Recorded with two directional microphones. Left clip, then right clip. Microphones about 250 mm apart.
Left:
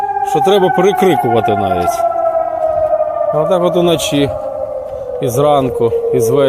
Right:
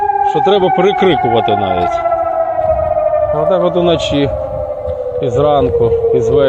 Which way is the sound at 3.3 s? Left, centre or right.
Centre.